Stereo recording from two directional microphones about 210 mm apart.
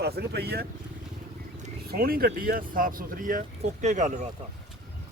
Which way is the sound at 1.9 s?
45° right (ahead or behind).